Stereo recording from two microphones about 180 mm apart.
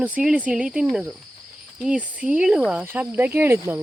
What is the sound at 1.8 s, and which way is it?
Speech, 5° right (ahead or behind).